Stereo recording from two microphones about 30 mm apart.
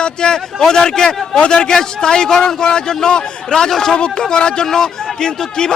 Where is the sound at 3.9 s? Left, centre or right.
Left.